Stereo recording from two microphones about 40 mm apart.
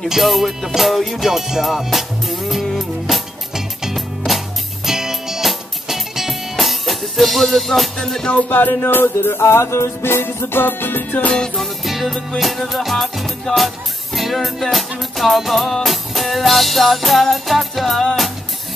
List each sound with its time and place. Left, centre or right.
0.1 s music: centre
3.1 s music: centre
8.3 s music: left
8.5 s music: left
11.5 s music: centre